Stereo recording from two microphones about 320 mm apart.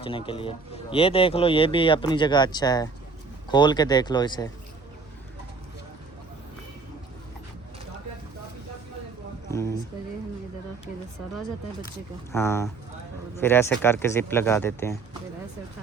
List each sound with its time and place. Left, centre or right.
0.0 s speech: centre
9.5 s speech: centre
12.3 s speech: centre